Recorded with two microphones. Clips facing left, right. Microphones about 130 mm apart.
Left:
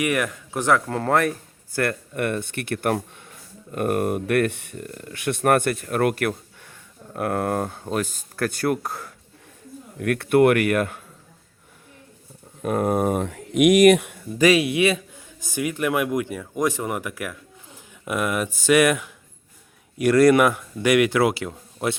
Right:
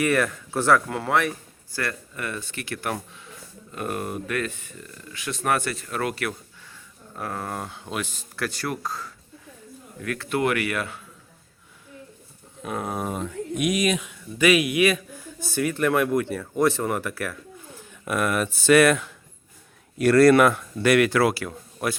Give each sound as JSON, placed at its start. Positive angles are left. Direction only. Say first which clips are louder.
{"t": 0.0, "sound": "speech", "louder": "right 1 dB", "side_deg": 15}
{"t": 0.9, "sound": "speech", "louder": "left 3 dB", "side_deg": 40}
{"t": 12.6, "sound": "speech", "louder": "left 8 dB", "side_deg": 50}
{"t": 14.3, "sound": "a man's voice", "louder": "left 2 dB", "side_deg": 35}